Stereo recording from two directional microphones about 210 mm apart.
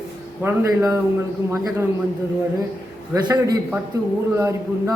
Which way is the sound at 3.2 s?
20° right (ahead or behind).